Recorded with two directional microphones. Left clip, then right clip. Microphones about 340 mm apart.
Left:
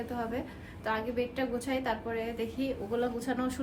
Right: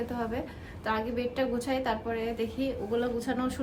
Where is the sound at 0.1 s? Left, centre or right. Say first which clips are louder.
Right 2 dB; centre.